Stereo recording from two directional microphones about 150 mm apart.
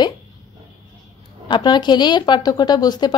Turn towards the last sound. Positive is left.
turn(degrees=25)  # may be behind; listen again after turning